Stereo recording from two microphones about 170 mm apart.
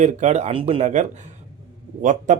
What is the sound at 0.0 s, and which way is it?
Speech, 40° right (ahead or behind).